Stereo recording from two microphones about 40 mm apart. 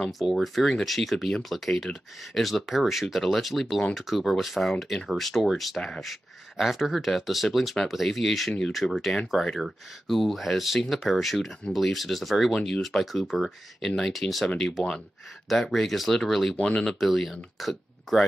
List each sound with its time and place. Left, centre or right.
0.0 s speech: centre
12.5 s speech: centre
12.8 s speech: centre
16.5 s speech: left
16.8 s speech: centre